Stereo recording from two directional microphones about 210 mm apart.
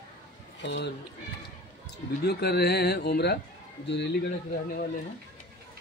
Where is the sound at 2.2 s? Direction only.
50° left (ahead or behind).